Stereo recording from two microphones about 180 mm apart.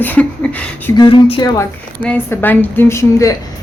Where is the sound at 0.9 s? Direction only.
25° left (ahead or behind).